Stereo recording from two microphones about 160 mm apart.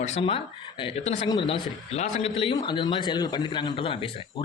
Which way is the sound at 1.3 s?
30° left (ahead or behind).